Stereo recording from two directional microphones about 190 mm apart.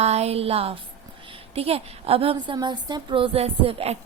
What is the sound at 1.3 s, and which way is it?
A woman's voice, 30° right (ahead or behind).